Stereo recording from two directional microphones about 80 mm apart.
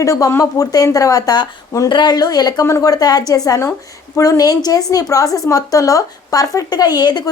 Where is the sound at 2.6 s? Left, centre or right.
Left.